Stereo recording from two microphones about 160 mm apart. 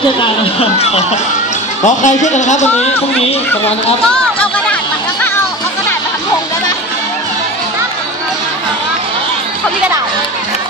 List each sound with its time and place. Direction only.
0.2 s speech: 40° left (ahead or behind)
1.9 s a man's voice: 50° left (ahead or behind)
4.1 s a sound: 5° left (ahead or behind)